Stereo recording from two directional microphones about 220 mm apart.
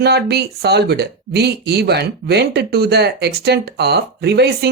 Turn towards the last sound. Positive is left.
turn(degrees=-50)  # may be behind; listen again after turning